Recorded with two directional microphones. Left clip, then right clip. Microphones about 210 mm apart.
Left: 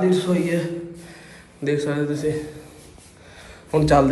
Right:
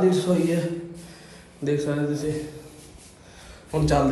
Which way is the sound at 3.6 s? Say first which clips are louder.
Left 6 dB; 15° right (ahead or behind).